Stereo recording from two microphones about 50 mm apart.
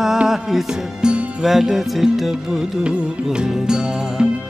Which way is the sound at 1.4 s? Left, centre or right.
Centre.